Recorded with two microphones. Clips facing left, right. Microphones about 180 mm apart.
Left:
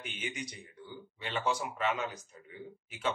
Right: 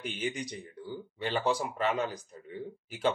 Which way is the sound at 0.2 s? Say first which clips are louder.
Right 5 dB; 35° right (ahead or behind).